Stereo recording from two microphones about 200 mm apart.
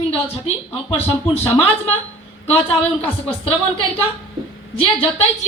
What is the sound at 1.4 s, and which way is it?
Speech, 10° left (ahead or behind).